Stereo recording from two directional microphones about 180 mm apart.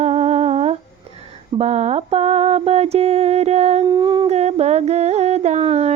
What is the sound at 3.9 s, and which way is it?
Humming, 20° right (ahead or behind).